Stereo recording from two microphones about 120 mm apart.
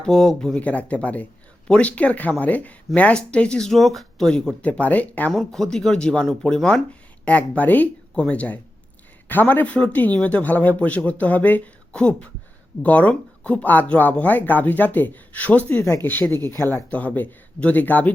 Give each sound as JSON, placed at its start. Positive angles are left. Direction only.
{"t": 0.0, "sound": "speech", "side_deg": 5}
{"t": 5.3, "sound": "speech", "side_deg": 5}
{"t": 16.3, "sound": "speech", "side_deg": -30}
{"t": 16.9, "sound": "speech", "side_deg": 10}